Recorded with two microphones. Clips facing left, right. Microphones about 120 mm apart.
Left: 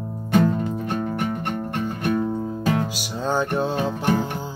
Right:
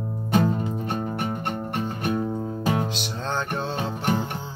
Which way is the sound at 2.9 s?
10° left (ahead or behind).